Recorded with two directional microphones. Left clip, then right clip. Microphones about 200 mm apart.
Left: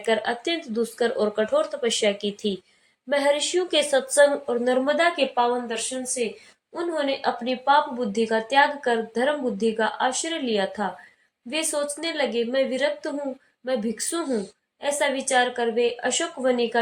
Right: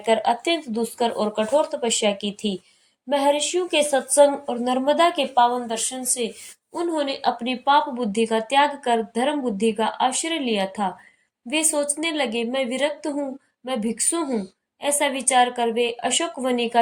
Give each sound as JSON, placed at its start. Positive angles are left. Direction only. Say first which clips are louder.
{"t": 0.0, "sound": "a woman's voice", "louder": "right 4 dB", "side_deg": -25}